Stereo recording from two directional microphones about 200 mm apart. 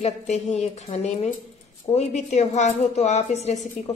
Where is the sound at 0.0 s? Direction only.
35° left (ahead or behind).